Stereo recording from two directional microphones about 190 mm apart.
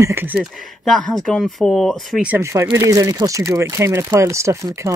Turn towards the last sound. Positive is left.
turn(degrees=-15)  # may be behind; listen again after turning